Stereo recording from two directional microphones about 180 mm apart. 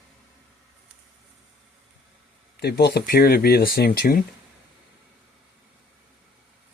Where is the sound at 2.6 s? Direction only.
65° left (ahead or behind).